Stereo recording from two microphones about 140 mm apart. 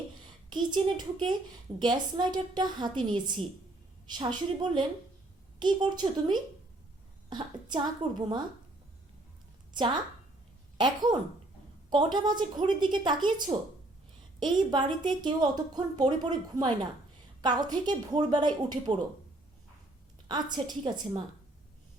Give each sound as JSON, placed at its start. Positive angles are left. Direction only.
{"t": 0.5, "sound": "a woman's voice", "side_deg": -30}
{"t": 9.7, "sound": "a woman's voice", "side_deg": -35}
{"t": 20.2, "sound": "a woman's voice", "side_deg": -30}